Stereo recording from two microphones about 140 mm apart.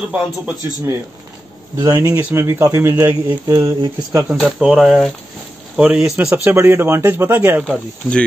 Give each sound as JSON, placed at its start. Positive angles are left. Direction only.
{"t": 0.1, "sound": "speech", "side_deg": -10}
{"t": 1.8, "sound": "speech", "side_deg": -20}
{"t": 4.4, "sound": "speech", "side_deg": -5}
{"t": 6.3, "sound": "speech", "side_deg": -15}